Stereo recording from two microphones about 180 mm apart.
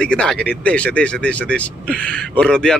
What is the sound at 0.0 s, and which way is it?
Speech, 5° left (ahead or behind).